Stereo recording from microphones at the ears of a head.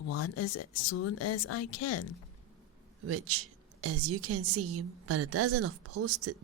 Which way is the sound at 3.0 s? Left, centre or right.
Right.